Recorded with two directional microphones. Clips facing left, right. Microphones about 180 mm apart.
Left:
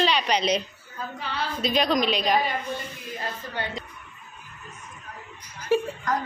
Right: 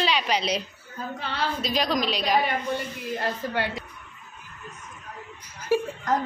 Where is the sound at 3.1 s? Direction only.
70° right (ahead or behind).